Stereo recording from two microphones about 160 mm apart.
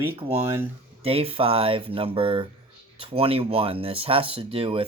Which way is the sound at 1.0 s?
35° right (ahead or behind).